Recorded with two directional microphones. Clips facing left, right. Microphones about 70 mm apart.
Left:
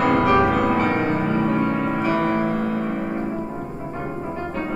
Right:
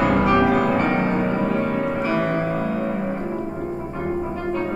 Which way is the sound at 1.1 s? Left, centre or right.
Left.